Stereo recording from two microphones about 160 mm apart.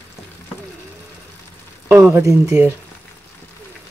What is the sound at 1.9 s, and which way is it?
Speech, 15° right (ahead or behind).